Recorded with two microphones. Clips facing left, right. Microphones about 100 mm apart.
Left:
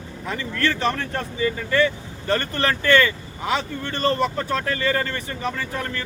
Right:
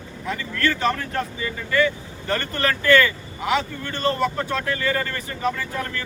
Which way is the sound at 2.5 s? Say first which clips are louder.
Right 2 dB; 30° left (ahead or behind).